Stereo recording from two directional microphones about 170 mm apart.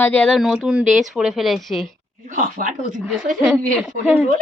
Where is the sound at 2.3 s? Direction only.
50° right (ahead or behind).